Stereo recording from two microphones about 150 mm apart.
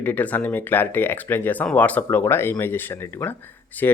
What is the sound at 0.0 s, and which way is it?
Speech, 10° left (ahead or behind).